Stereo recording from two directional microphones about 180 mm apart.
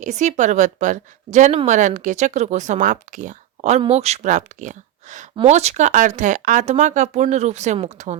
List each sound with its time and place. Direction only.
0.0 s a woman's voice: 40° right (ahead or behind)